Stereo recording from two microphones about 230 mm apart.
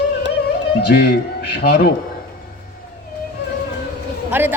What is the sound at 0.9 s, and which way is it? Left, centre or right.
A man's voice, left.